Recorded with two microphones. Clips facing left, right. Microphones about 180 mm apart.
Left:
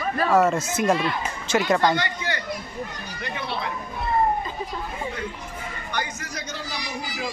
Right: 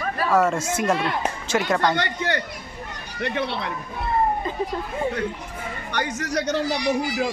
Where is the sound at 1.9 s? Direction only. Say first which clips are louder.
Right 3 dB; 60° right (ahead or behind).